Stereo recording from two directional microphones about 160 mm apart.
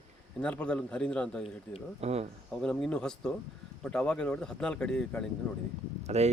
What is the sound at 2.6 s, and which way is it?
Speech, 5° left (ahead or behind).